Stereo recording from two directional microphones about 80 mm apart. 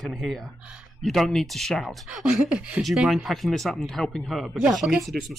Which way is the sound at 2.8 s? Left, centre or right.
Centre.